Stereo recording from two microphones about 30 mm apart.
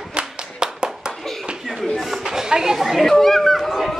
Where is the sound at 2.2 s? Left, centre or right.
Centre.